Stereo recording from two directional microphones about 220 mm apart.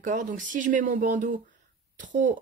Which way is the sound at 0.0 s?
35° right (ahead or behind).